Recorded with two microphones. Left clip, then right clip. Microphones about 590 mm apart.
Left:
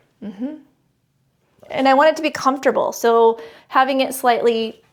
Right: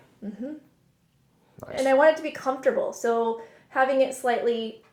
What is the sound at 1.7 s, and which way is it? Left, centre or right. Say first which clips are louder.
Speech: left 5 dB; left.